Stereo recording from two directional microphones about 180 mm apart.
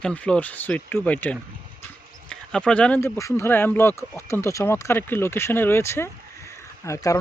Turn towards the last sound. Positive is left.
turn(degrees=20)  # may be behind; listen again after turning